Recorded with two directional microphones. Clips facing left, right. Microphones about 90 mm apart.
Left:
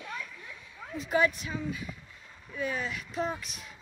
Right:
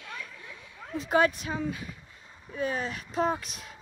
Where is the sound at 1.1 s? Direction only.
60° right (ahead or behind).